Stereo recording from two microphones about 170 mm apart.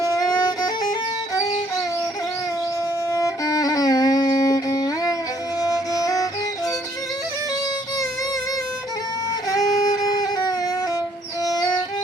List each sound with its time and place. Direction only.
0.2 s violin: 20° left (ahead or behind)
3.1 s music: 20° left (ahead or behind)
9.5 s music: 20° left (ahead or behind)